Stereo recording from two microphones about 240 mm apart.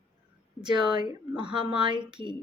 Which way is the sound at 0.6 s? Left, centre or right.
Centre.